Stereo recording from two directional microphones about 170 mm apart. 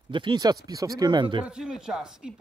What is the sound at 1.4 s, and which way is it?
Speech, 5° right (ahead or behind).